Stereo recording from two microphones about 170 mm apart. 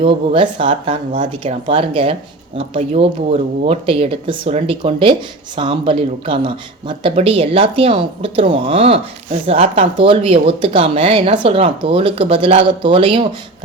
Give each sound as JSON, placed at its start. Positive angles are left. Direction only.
{"t": 0.0, "sound": "speech", "side_deg": -30}